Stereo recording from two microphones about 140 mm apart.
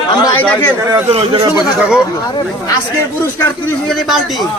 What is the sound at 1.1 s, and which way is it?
Speech, 45° right (ahead or behind).